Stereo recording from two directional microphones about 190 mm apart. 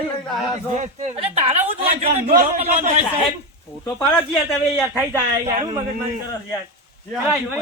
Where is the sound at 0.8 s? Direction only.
35° right (ahead or behind).